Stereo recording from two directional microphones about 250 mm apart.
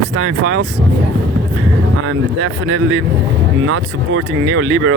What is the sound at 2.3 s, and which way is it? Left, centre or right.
Speech, right.